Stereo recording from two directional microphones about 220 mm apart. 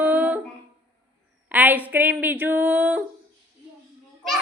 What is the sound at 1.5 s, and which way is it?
A woman's voice, 10° right (ahead or behind).